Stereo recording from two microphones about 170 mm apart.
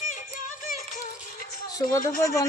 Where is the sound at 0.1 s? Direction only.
50° left (ahead or behind).